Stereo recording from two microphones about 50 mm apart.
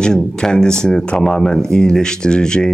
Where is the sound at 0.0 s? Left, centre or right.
Centre.